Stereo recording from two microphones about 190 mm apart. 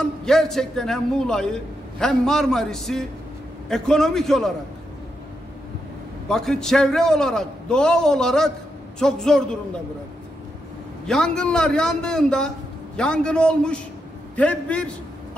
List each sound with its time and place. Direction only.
0.2 s a man's voice: centre (ahead or behind)
6.2 s a man's voice: 5° left (ahead or behind)
11.1 s a man's voice: 5° left (ahead or behind)